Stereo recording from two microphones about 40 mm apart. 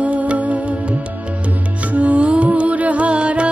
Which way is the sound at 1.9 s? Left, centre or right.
Right.